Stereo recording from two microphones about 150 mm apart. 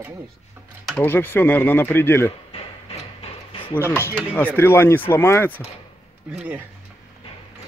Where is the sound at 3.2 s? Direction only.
35° left (ahead or behind).